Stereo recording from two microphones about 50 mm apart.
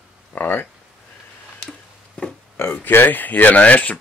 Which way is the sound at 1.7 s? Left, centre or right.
Centre.